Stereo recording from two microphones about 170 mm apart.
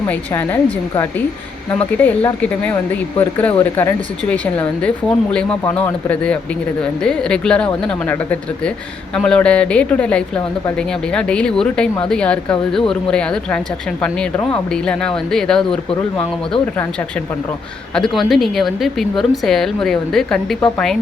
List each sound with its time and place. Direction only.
0.1 s speech: 10° left (ahead or behind)
15.9 s speech: 35° left (ahead or behind)
16.7 s speech: 10° left (ahead or behind)
17.9 s speech: centre (ahead or behind)